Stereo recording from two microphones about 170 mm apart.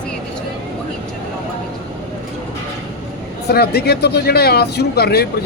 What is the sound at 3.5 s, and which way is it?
Speech, 70° left (ahead or behind).